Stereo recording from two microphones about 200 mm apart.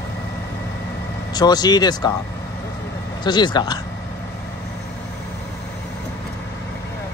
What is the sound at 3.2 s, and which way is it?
Speech, 20° left (ahead or behind).